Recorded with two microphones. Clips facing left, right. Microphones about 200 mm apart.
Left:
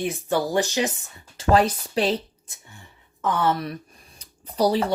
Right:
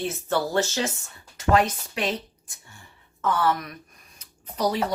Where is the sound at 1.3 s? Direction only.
30° left (ahead or behind).